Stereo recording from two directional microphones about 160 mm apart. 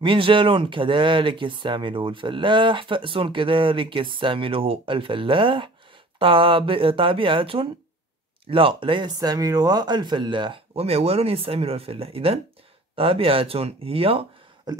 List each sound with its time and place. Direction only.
0.0 s speech: 30° right (ahead or behind)